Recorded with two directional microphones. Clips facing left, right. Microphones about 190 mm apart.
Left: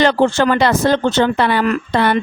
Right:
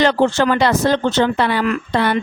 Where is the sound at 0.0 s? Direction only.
55° left (ahead or behind).